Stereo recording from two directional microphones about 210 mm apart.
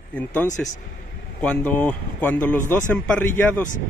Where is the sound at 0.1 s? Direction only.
5° left (ahead or behind).